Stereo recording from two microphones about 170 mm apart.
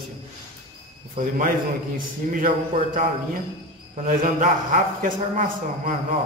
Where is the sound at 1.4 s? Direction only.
55° right (ahead or behind).